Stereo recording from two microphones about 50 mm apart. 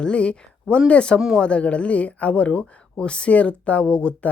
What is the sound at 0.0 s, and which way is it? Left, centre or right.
Speech, left.